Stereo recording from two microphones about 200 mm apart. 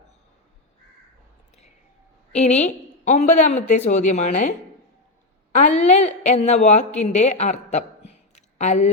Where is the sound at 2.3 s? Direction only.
35° left (ahead or behind).